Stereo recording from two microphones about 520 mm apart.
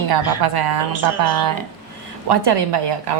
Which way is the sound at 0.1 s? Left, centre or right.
Right.